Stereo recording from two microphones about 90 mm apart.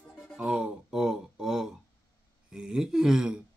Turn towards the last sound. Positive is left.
turn(degrees=-5)  # may be behind; listen again after turning